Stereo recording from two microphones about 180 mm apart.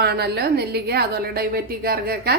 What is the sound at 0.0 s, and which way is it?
A woman's voice, 65° right (ahead or behind).